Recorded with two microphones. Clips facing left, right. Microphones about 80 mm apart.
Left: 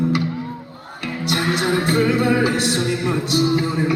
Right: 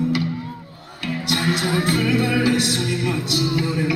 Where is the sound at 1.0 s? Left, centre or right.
Left.